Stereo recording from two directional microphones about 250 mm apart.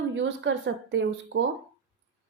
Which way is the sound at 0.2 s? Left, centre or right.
Right.